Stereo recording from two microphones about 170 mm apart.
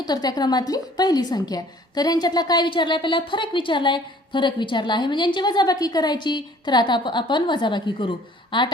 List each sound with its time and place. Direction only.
0.0 s a woman's voice: 25° left (ahead or behind)